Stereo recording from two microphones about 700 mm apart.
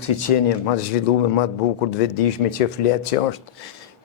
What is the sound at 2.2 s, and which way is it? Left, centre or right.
Speech, left.